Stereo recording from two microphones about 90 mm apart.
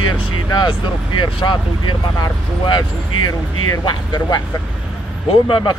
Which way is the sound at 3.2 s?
50° left (ahead or behind).